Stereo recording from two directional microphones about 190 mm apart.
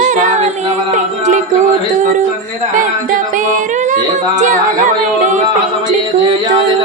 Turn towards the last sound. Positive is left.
turn(degrees=-45)  # may be behind; listen again after turning